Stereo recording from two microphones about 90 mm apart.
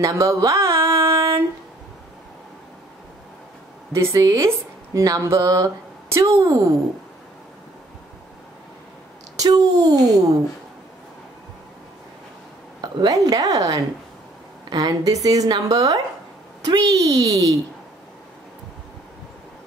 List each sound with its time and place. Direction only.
0.0 s a sound: 35° right (ahead or behind)
3.9 s speech: 35° right (ahead or behind)
9.4 s a woman's voice: 40° right (ahead or behind)
12.8 s a woman's voice: 45° right (ahead or behind)